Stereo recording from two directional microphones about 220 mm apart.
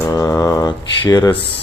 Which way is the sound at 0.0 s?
15° left (ahead or behind).